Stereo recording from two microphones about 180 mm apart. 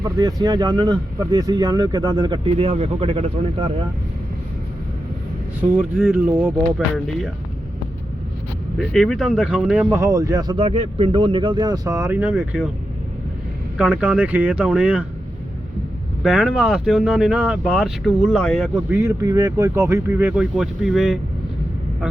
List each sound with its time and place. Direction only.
0.0 s speech: 20° right (ahead or behind)
5.5 s speech: 5° right (ahead or behind)
8.9 s speech: centre (ahead or behind)
10.0 s speech: 20° right (ahead or behind)
13.7 s speech: 5° right (ahead or behind)
16.2 s speech: 5° right (ahead or behind)
18.9 s speech: 15° right (ahead or behind)